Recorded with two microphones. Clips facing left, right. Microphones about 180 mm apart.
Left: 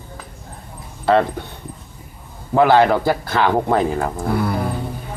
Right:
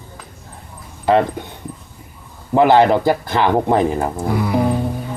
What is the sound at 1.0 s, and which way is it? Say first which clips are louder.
Speech: right 1 dB; 15° right (ahead or behind).